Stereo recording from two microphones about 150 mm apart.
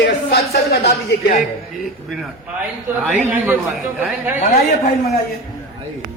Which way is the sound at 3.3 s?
10° right (ahead or behind).